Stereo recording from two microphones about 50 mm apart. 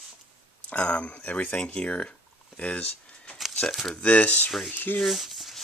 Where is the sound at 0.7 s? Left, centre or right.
Left.